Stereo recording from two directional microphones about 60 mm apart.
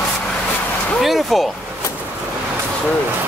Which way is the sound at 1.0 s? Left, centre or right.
Centre.